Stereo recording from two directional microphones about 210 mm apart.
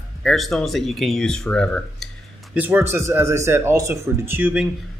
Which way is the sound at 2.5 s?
10° right (ahead or behind).